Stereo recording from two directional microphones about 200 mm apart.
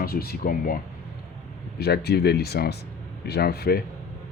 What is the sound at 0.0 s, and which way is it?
Speech, 50° left (ahead or behind).